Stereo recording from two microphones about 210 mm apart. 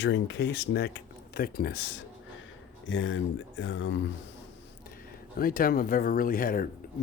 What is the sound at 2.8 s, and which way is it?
Speech, 65° left (ahead or behind).